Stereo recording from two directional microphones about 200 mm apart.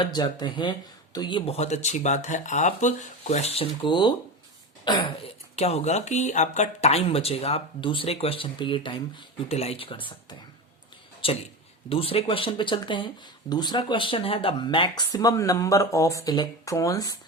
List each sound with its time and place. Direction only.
0.0 s speech: 20° left (ahead or behind)